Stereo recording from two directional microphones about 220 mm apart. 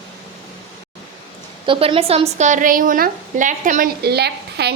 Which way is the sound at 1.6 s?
25° right (ahead or behind).